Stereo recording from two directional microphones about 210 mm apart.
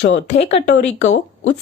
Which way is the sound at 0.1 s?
30° left (ahead or behind).